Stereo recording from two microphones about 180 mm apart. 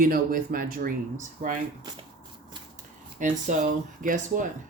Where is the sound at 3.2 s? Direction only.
45° right (ahead or behind).